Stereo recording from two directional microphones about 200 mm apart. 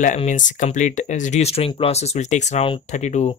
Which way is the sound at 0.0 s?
40° left (ahead or behind).